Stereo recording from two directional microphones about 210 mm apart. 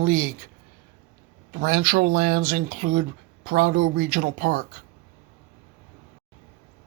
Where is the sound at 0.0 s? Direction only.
40° right (ahead or behind).